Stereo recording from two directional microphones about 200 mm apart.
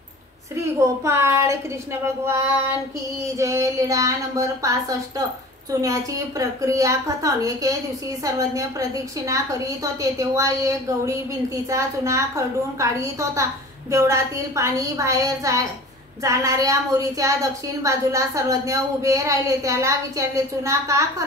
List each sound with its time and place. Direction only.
0.6 s a woman's voice: 15° right (ahead or behind)
3.3 s a woman's voice: 15° right (ahead or behind)